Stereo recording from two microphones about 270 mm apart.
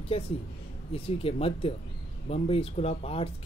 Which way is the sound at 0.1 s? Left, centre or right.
Left.